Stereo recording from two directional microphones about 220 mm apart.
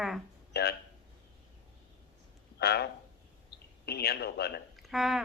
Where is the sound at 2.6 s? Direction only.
45° left (ahead or behind).